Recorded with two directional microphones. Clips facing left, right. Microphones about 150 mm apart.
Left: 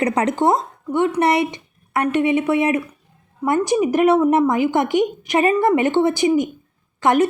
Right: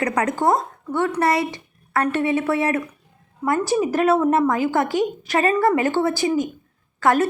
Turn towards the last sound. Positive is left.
turn(degrees=20)  # may be behind; listen again after turning